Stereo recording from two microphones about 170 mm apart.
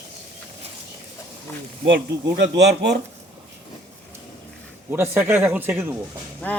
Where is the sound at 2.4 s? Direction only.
90° right.